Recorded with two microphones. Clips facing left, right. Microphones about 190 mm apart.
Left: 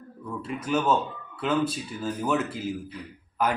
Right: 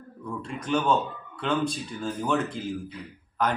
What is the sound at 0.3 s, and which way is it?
Speech, 5° left (ahead or behind).